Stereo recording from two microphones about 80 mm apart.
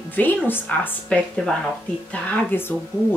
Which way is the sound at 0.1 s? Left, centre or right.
Left.